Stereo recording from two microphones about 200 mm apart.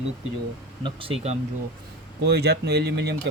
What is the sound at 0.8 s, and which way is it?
Speech, 30° right (ahead or behind).